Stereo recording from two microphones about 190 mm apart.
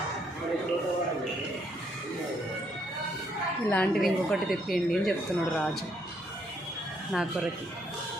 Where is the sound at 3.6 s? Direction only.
10° left (ahead or behind).